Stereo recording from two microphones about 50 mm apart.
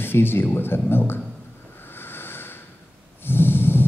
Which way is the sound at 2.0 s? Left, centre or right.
Left.